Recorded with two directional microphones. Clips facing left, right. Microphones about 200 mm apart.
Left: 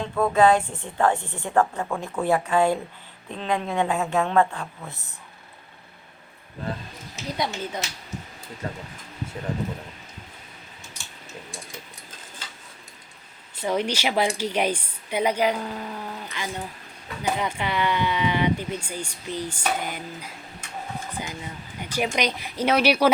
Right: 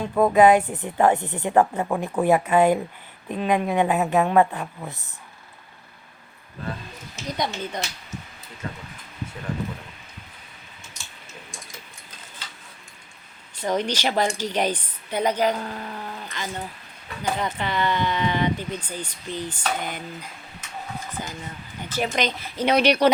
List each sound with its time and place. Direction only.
0.2 s a woman's voice: 15° right (ahead or behind)
7.3 s speech: 5° left (ahead or behind)
8.6 s speech: 35° left (ahead or behind)
13.6 s speech: 10° left (ahead or behind)